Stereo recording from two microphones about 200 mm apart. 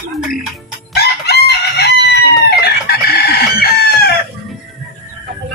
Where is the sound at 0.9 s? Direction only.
55° left (ahead or behind).